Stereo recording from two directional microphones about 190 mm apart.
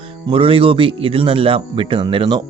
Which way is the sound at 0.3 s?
30° right (ahead or behind).